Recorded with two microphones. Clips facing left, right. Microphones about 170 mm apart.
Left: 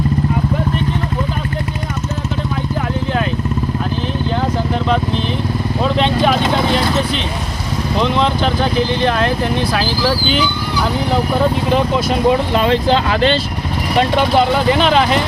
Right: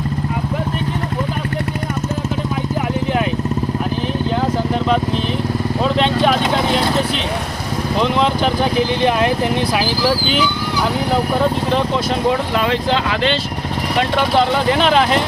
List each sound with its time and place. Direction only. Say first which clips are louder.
4.5 s vehicle: even; 5° right (ahead or behind)
7.9 s speech: left 1 dB; 5° right (ahead or behind)
11.1 s speech: left 2 dB; 5° left (ahead or behind)
12.5 s speech: left 3 dB; 30° left (ahead or behind)
14.3 s speech: left 1 dB; 5° left (ahead or behind)